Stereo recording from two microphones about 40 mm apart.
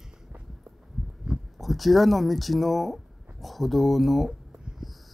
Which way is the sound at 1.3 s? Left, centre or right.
Centre.